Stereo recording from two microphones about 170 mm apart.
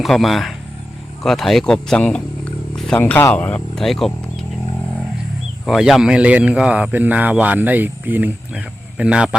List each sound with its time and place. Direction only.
0.0 s a man's voice: centre (ahead or behind)
5.6 s a man's voice: centre (ahead or behind)